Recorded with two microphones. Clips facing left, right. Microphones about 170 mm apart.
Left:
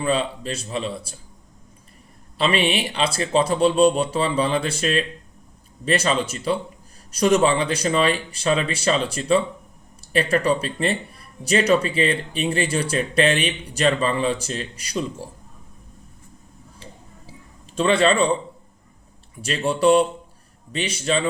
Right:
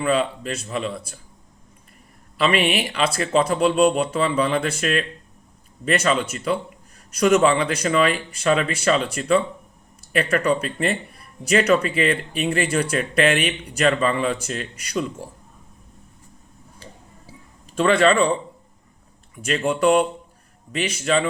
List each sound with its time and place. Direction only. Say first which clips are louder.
0.0 s speech: right 1 dB; 30° left (ahead or behind)
2.4 s speech: right 1 dB; 30° left (ahead or behind)
17.8 s speech: right 1 dB; 30° left (ahead or behind)
19.4 s speech: even; 30° left (ahead or behind)